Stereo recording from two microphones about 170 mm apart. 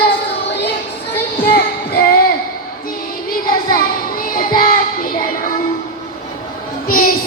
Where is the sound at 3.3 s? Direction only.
55° left (ahead or behind).